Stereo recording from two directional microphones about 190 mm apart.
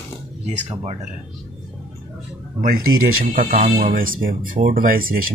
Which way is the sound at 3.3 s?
45° right (ahead or behind).